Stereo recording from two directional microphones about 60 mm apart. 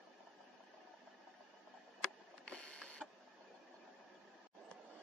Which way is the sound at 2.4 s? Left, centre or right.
Centre.